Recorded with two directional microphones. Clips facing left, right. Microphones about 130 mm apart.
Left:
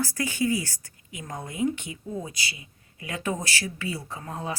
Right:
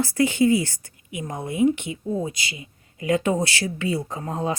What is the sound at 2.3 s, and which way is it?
Speech, 35° left (ahead or behind).